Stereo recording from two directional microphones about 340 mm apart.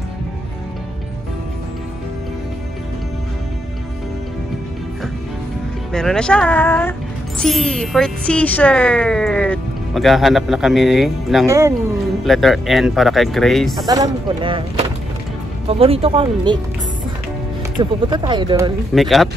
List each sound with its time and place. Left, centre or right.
5.9 s speech: centre
13.8 s speech: centre
17.7 s speech: centre
18.9 s speech: centre